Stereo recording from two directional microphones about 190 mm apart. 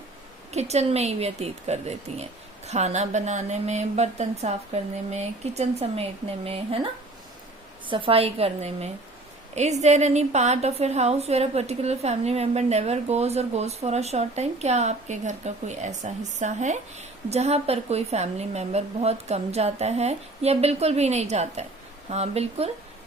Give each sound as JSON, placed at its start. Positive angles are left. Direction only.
{"t": 0.5, "sound": "a woman's voice", "side_deg": -35}
{"t": 7.9, "sound": "a woman's voice", "side_deg": -25}